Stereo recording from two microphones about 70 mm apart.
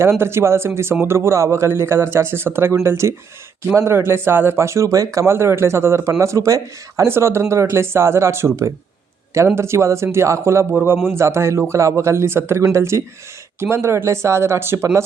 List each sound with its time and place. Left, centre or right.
0.0 s speech: right
10.8 s a man's voice: right
11.2 s speech: right